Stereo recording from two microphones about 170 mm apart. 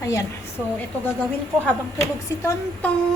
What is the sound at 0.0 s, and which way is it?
Speech, 20° left (ahead or behind).